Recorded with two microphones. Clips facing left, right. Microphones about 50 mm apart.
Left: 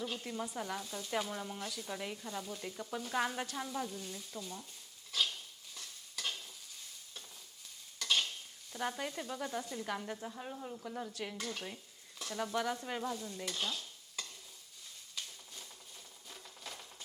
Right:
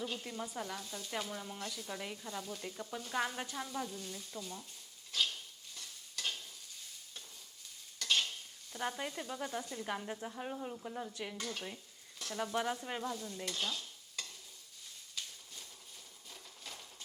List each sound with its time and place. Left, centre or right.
0.0 s speech: centre
5.1 s stir: centre
7.9 s stir: centre
8.7 s speech: centre
10.8 s speech: centre
12.5 s stir: centre
16.3 s a sound: centre